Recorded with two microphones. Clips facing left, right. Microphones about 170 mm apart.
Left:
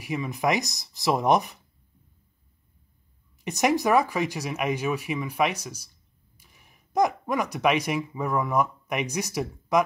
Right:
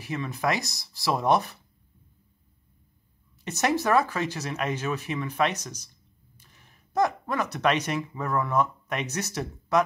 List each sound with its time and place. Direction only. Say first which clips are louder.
0.0 s speech: left 2 dB; 15° left (ahead or behind)
3.4 s speech: left 2 dB; 15° left (ahead or behind)